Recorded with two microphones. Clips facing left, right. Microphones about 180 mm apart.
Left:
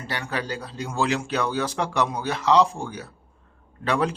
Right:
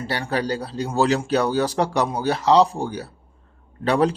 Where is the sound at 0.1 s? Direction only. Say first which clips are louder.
Right 5 dB; 35° right (ahead or behind).